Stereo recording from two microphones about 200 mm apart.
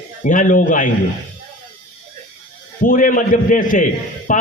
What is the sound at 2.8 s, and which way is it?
A man's voice, 45° left (ahead or behind).